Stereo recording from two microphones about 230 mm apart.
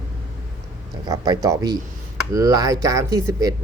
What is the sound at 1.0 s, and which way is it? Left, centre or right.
Speech, centre.